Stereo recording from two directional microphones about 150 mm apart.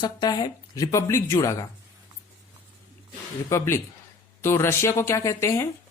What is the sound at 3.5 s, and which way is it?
Speech, 15° left (ahead or behind).